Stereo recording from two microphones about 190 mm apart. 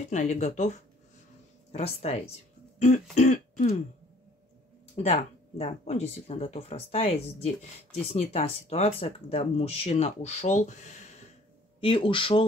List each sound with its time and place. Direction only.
0.0 s speech: 40° left (ahead or behind)
4.9 s speech: 35° left (ahead or behind)
11.8 s speech: 25° left (ahead or behind)